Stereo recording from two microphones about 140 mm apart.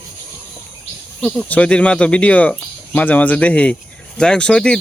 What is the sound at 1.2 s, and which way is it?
Speech, 10° left (ahead or behind).